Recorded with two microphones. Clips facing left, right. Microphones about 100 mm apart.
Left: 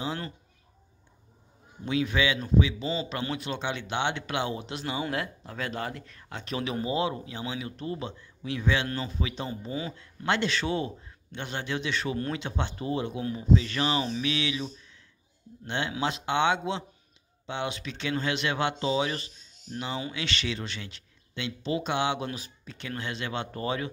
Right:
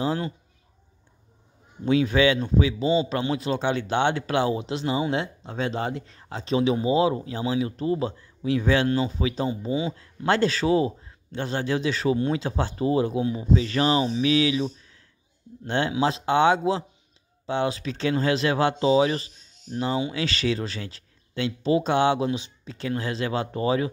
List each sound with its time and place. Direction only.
0.0 s speech: 35° right (ahead or behind)
1.9 s speech: 35° right (ahead or behind)
9.7 s speech: 20° right (ahead or behind)
9.9 s speech: 35° right (ahead or behind)